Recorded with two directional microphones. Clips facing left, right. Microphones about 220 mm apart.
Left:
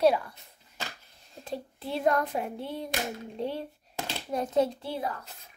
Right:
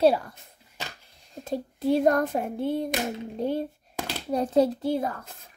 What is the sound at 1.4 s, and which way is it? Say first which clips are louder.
Speech: right 8 dB; 45° right (ahead or behind).